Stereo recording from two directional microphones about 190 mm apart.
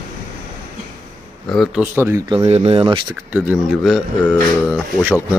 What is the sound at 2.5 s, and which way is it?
Speech, 35° right (ahead or behind).